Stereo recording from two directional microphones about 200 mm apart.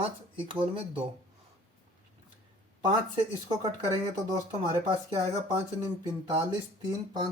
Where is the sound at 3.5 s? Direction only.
20° right (ahead or behind).